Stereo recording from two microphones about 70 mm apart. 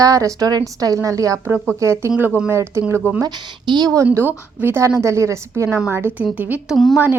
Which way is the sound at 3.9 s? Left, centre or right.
Right.